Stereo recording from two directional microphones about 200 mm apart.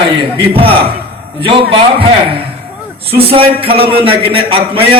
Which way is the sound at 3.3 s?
30° right (ahead or behind).